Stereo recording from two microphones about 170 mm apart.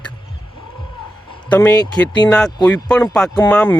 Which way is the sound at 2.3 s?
5° left (ahead or behind).